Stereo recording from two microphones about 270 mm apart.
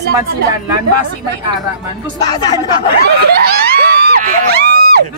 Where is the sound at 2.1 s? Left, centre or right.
Centre.